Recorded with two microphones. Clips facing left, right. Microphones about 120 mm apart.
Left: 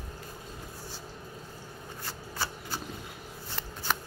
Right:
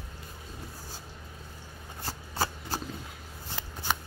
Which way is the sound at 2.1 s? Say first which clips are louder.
Right 5 dB; 40° right (ahead or behind).